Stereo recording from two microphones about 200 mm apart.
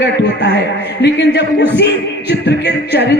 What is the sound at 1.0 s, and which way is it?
Speech, 60° left (ahead or behind).